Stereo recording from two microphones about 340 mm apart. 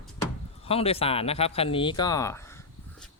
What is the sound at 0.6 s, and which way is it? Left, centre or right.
Speech, centre.